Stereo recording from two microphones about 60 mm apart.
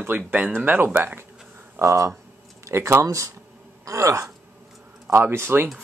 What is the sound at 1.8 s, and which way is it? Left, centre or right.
Speech, right.